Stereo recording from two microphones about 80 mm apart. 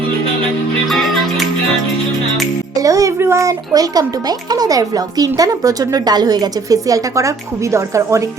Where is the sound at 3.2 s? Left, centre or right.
Right.